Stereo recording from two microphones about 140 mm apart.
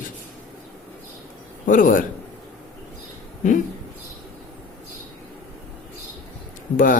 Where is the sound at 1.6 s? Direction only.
75° left (ahead or behind).